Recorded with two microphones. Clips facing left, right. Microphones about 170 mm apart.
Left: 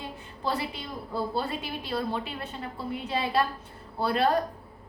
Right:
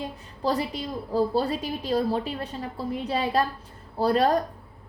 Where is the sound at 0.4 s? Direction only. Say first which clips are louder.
Right 5 dB; 35° right (ahead or behind).